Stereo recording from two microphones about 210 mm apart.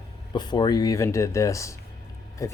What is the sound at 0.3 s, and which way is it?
Speech, 20° left (ahead or behind).